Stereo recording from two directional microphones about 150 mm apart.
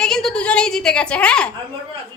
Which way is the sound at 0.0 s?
5° left (ahead or behind).